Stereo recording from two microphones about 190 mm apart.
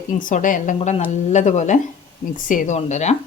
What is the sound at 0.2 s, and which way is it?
A woman's voice, 45° left (ahead or behind).